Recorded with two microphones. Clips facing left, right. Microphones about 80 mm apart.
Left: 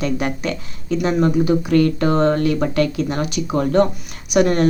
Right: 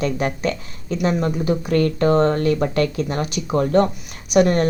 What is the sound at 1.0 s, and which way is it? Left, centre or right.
Speech, left.